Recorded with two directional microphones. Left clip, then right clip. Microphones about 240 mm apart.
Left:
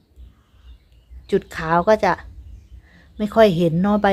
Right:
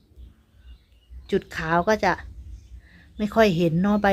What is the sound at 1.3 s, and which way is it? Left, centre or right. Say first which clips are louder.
A woman's voice: left 4 dB; centre.